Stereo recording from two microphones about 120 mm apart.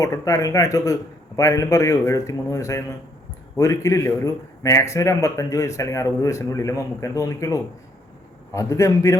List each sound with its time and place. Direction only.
0.0 s a man's voice: 30° left (ahead or behind)